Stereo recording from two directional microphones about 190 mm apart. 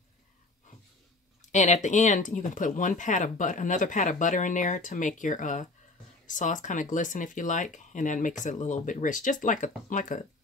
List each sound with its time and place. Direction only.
1.4 s speech: 40° left (ahead or behind)